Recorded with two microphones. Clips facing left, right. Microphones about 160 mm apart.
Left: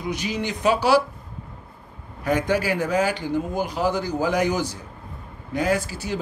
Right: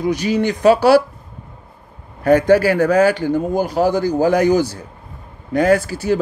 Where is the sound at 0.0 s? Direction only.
40° right (ahead or behind).